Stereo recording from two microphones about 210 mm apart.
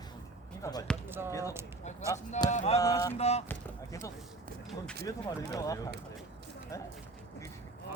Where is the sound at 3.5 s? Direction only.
15° left (ahead or behind).